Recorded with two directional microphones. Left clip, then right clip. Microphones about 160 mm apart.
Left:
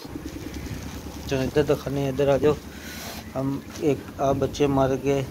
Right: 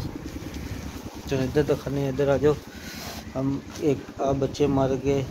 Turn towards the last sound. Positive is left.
turn(degrees=0)  # may be behind; listen again after turning